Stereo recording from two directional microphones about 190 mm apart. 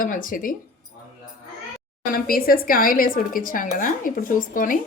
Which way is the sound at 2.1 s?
50° left (ahead or behind).